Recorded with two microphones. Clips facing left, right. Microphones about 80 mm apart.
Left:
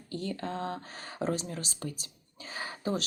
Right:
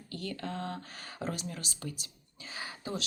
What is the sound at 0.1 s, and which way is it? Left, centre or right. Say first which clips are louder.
Speech: left 3 dB; left.